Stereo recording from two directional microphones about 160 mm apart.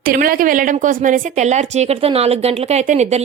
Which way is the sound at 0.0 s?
65° right (ahead or behind).